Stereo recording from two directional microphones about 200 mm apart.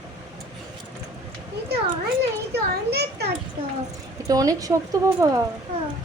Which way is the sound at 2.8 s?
55° right (ahead or behind).